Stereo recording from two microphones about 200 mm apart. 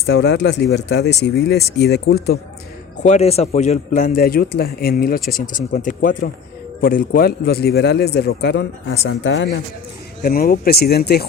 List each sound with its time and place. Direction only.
0.0 s a man's voice: 55° left (ahead or behind)
3.0 s a man's voice: 35° left (ahead or behind); by 9.6 s 60° left (ahead or behind)
10.2 s a man's voice: 50° left (ahead or behind)